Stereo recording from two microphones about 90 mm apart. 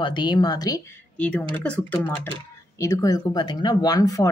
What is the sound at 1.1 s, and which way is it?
Speech, 15° left (ahead or behind).